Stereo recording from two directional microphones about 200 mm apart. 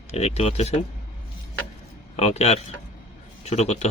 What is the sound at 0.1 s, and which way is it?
Speech, 30° left (ahead or behind).